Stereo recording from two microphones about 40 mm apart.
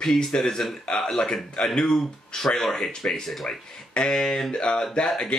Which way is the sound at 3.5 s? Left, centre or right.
Centre.